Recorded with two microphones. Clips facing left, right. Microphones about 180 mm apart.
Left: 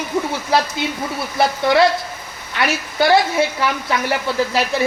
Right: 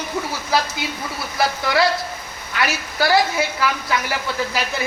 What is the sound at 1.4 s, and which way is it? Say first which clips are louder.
Speech: left 4 dB; 25° left (ahead or behind).